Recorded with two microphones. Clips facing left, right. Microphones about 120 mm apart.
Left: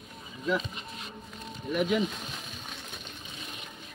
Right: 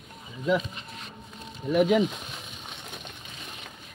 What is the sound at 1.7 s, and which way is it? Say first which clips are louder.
Speech: right 6 dB; 70° right (ahead or behind).